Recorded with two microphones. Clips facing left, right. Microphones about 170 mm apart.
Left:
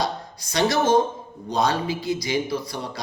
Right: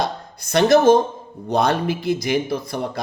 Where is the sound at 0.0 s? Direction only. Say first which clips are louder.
Right 2 dB; 55° right (ahead or behind).